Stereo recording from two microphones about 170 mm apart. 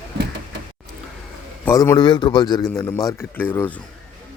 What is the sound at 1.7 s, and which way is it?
A man's voice, 15° left (ahead or behind).